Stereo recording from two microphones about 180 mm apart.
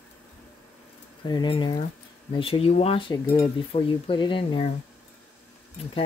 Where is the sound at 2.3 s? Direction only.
30° left (ahead or behind).